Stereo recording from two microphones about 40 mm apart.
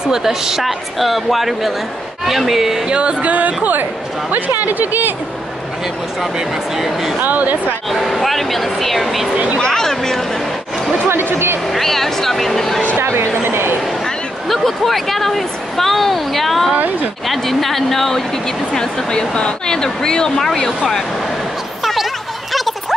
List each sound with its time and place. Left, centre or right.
0.1 s a woman's voice: centre
2.9 s speech: right
6.8 s speech: centre
7.2 s speech: right
8.1 s speech: centre
9.6 s speech: centre
11.1 s speech: right
11.6 s speech: centre
13.0 s a sound: right
14.5 s speech: centre
18.7 s speech: centre
22.5 s a sound: centre